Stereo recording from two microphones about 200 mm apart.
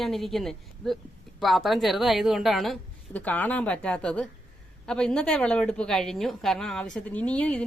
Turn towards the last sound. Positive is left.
turn(degrees=5)  # may be behind; listen again after turning